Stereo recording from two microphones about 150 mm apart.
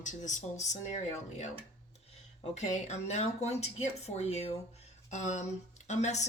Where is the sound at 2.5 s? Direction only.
50° left (ahead or behind).